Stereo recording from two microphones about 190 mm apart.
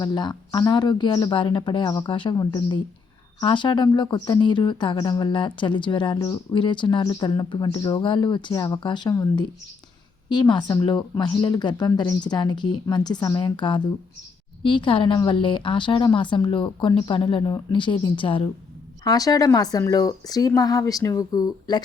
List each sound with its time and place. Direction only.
0.0 s speech: 25° left (ahead or behind)